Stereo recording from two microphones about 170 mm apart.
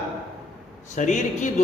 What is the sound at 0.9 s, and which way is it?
Speech, 45° left (ahead or behind).